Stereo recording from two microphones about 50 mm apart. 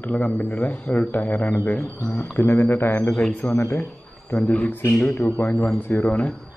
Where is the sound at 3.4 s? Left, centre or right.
Left.